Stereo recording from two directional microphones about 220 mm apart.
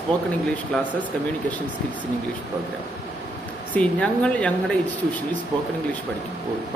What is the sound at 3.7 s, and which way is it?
Speech, 5° left (ahead or behind).